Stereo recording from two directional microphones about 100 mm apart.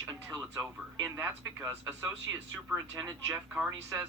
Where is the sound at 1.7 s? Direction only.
20° right (ahead or behind).